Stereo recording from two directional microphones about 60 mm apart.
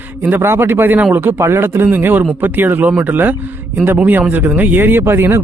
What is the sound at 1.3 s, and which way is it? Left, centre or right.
Speech, right.